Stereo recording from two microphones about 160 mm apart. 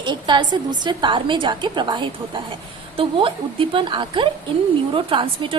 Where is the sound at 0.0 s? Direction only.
30° right (ahead or behind).